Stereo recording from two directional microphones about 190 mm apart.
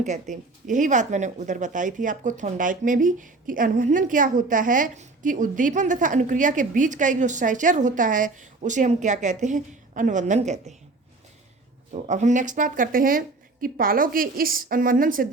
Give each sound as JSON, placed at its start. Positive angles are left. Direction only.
{"t": 0.0, "sound": "speech", "side_deg": -40}
{"t": 12.0, "sound": "a woman's voice", "side_deg": -40}